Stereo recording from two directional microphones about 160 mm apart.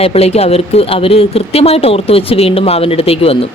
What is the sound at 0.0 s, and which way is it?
Speech, 40° left (ahead or behind).